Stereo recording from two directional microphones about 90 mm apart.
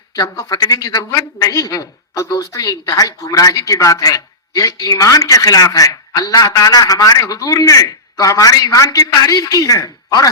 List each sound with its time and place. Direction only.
0.1 s a woman's voice: 45° left (ahead or behind)